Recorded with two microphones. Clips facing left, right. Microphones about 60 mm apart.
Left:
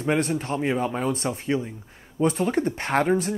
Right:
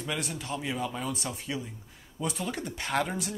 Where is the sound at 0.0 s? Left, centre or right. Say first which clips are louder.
Left 11 dB; left.